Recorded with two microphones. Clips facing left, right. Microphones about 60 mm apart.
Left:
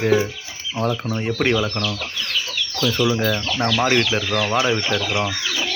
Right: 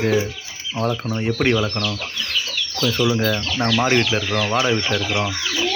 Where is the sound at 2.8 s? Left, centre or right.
Centre.